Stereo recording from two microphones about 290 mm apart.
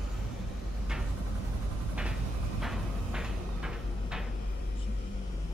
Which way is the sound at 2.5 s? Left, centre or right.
Centre.